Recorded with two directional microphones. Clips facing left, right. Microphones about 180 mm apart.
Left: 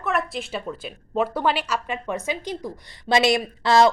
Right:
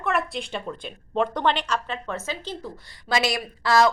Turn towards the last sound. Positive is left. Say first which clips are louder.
# left 3 dB
turn(degrees=25)  # may be behind; listen again after turning